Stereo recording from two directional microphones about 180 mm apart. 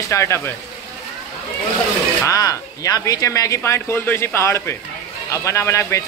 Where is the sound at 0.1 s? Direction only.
15° left (ahead or behind).